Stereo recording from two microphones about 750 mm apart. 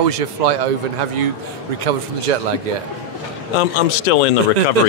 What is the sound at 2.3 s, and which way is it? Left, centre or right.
Speech, right.